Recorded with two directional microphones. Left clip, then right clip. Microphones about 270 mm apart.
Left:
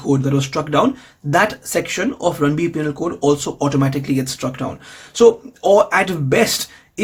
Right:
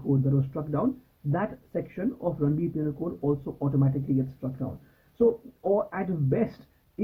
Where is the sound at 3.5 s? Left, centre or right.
Left.